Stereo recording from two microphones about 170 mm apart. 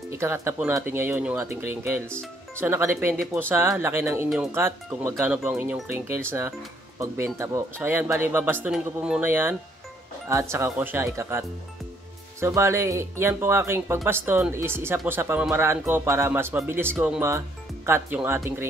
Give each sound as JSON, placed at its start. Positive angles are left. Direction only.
{"t": 0.1, "sound": "speech", "side_deg": -15}